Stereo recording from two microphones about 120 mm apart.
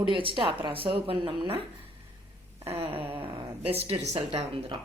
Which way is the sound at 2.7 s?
50° right (ahead or behind).